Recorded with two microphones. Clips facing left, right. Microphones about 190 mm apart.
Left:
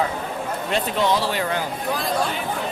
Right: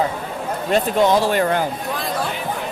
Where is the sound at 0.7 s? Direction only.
45° right (ahead or behind).